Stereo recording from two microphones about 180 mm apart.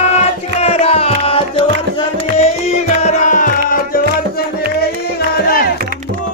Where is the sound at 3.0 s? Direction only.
40° left (ahead or behind).